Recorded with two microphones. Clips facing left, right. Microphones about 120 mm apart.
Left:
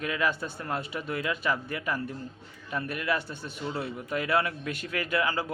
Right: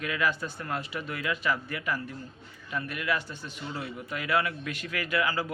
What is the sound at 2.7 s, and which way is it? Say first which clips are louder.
A man's voice: left 1 dB; 35° left (ahead or behind).